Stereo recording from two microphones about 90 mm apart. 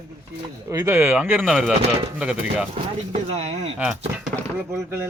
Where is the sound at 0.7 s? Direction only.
30° right (ahead or behind).